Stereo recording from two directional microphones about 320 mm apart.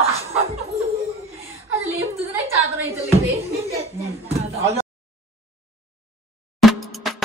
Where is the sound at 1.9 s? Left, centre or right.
Centre.